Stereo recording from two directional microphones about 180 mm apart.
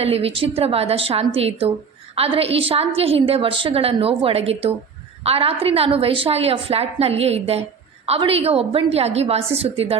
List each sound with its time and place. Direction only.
0.0 s a woman's voice: 35° right (ahead or behind)